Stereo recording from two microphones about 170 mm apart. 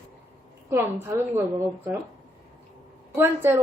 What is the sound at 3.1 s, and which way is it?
Speech, 15° right (ahead or behind).